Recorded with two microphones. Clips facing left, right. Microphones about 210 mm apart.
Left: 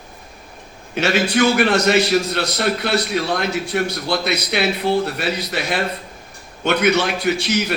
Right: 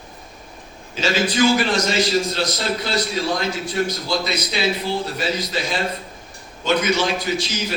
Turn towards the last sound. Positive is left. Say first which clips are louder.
# left 5 dB
turn(degrees=65)  # may be behind; listen again after turning